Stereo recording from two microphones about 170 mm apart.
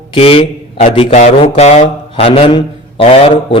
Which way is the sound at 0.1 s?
35° left (ahead or behind).